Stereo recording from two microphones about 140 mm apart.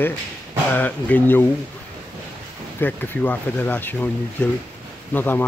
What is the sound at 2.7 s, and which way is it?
Speech, 15° left (ahead or behind).